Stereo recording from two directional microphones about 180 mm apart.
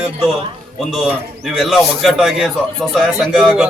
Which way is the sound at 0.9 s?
Centre (ahead or behind).